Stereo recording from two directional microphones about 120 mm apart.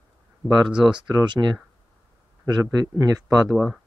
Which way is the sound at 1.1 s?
40° right (ahead or behind).